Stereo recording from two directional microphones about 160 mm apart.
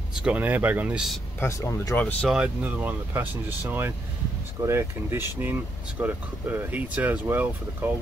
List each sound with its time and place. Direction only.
0.1 s speech: 5° right (ahead or behind)
1.4 s speech: 15° left (ahead or behind)
2.2 s speech: 5° right (ahead or behind)